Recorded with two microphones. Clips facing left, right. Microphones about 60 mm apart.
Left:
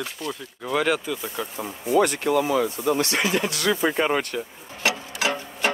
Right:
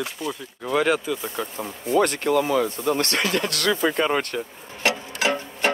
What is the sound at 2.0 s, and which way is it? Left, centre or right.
Speech, right.